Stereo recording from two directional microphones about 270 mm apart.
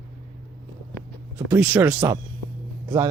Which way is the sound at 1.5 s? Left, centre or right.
Centre.